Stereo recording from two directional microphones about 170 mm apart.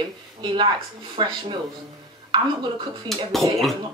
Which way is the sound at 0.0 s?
25° right (ahead or behind).